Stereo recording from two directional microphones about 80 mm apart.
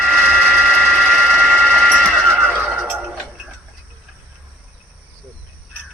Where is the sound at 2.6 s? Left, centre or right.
Centre.